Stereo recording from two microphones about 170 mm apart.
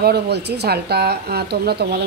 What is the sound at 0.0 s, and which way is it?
Speech, 75° right (ahead or behind).